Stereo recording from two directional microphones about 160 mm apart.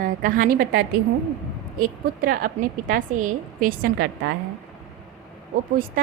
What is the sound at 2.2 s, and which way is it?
A woman's voice, 60° right (ahead or behind).